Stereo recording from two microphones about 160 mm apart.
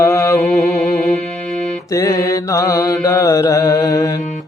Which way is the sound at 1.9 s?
20° left (ahead or behind).